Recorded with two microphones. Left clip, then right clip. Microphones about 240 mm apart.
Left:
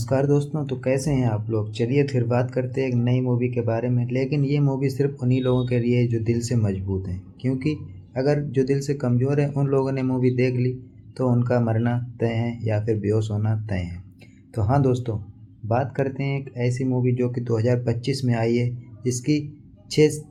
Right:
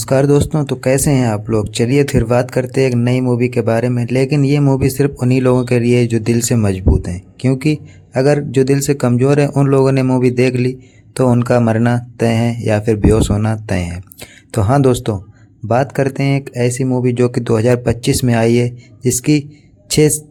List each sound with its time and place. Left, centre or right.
0.0 s speech: right